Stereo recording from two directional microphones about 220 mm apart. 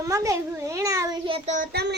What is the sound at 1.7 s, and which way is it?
Speech, 50° right (ahead or behind).